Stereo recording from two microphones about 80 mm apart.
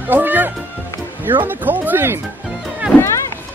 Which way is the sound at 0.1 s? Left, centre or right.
Right.